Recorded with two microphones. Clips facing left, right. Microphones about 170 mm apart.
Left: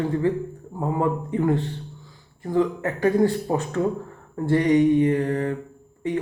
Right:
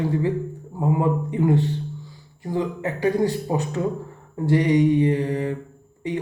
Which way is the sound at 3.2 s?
15° right (ahead or behind).